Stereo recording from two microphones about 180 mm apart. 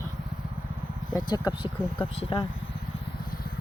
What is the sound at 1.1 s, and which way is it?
Speech, 25° left (ahead or behind).